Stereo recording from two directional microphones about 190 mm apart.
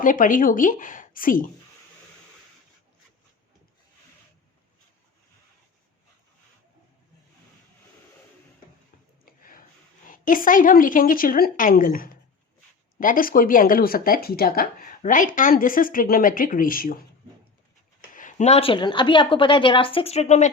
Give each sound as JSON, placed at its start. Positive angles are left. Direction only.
{"t": 0.0, "sound": "speech", "side_deg": 45}
{"t": 9.2, "sound": "a sound", "side_deg": 50}
{"t": 10.1, "sound": "speech", "side_deg": 45}
{"t": 18.1, "sound": "a woman's voice", "side_deg": 45}